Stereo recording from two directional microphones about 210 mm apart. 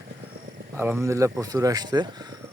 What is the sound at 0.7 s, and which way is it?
Speech, 10° right (ahead or behind).